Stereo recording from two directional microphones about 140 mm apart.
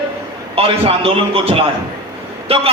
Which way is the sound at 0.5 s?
45° right (ahead or behind).